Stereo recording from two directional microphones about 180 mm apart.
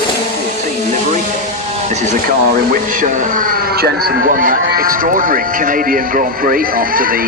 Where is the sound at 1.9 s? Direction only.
40° right (ahead or behind).